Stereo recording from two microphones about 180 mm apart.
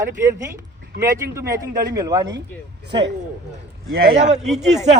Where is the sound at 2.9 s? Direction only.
75° right (ahead or behind).